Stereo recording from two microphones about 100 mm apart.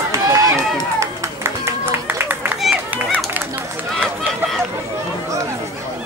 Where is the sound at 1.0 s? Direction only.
25° right (ahead or behind).